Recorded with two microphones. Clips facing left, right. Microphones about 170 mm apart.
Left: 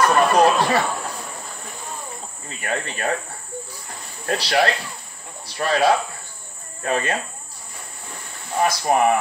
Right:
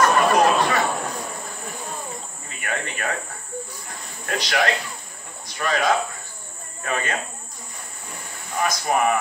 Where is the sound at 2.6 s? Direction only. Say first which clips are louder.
Left 3 dB; 35° left (ahead or behind).